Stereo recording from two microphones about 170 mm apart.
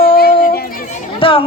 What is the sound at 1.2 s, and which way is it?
Music, 30° left (ahead or behind).